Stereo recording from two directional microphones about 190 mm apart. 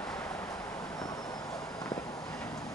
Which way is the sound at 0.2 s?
15° left (ahead or behind).